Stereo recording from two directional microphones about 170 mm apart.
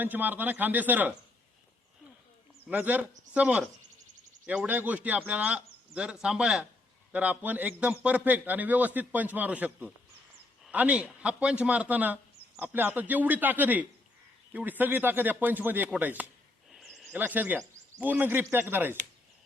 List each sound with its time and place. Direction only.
0.0 s a man's voice: 10° right (ahead or behind)
2.6 s a man's voice: 10° right (ahead or behind)
16.7 s a sound: centre (ahead or behind)
18.0 s a man's voice: 10° right (ahead or behind)